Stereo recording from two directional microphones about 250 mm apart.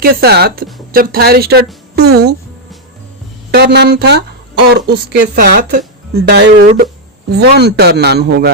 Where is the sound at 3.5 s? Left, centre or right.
Right.